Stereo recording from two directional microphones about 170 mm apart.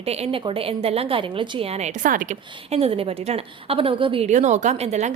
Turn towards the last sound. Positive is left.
turn(degrees=-40)  # may be behind; listen again after turning